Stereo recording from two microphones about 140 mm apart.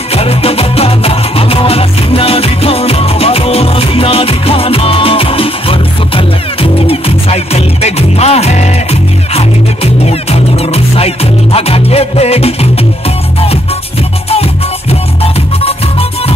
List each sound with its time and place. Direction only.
0.1 s music: 45° left (ahead or behind)
10.0 s music: 45° left (ahead or behind)
14.3 s music: 45° left (ahead or behind)